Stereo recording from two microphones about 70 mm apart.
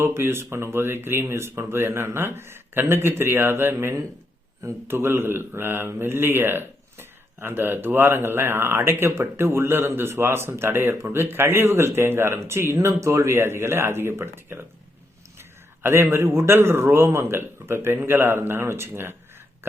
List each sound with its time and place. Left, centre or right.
0.0 s speech: right